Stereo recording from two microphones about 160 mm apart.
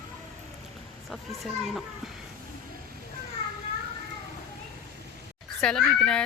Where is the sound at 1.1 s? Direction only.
Centre (ahead or behind).